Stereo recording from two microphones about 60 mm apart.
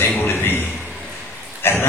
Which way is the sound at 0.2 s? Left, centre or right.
Left.